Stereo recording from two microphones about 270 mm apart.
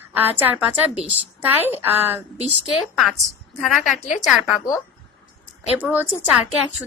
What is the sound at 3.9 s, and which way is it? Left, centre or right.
Speech, left.